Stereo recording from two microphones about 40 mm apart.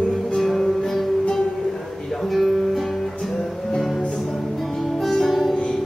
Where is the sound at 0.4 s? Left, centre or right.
Centre.